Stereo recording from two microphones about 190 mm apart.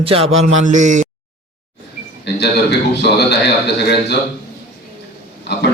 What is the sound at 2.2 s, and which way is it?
A man's voice, 60° left (ahead or behind).